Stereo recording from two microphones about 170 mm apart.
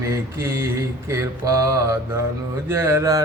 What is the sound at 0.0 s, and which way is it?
Mantra, 15° right (ahead or behind).